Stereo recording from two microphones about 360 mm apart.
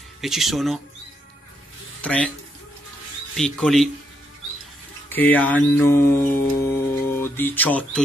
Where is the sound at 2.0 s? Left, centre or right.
Centre.